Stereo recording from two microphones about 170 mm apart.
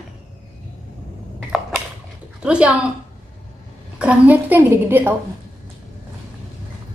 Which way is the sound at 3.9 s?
10° right (ahead or behind).